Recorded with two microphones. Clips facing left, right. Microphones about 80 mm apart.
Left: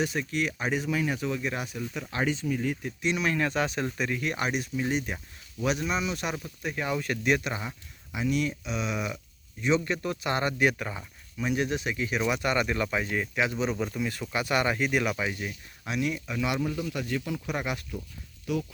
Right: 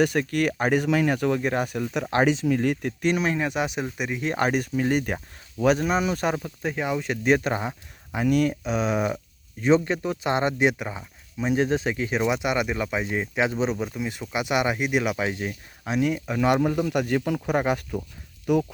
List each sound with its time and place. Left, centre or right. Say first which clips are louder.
0.0 s speech: right 7 dB; right
3.0 s speech: right 5 dB; right
3.3 s speech: right 2 dB; centre
4.3 s speech: right 6 dB; right
5.1 s speech: right 7 dB; right
6.8 s speech: right 4 dB; centre; by 8.2 s right
8.2 s speech: right 6 dB; right; by 11.0 s centre
11.3 s speech: right 5 dB; right
12.3 s speech: right 2 dB; centre
13.7 s speech: right 1 dB; centre
15.3 s speech: right 5 dB; right